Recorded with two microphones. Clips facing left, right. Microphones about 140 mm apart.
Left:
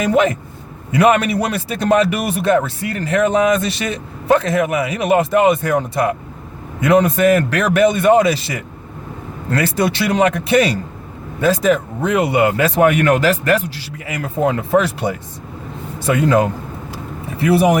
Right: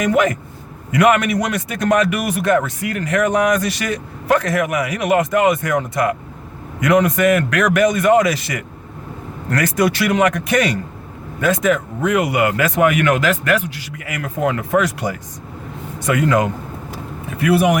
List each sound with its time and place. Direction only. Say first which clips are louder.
0.0 s a man's voice: left 1 dB; 30° left (ahead or behind)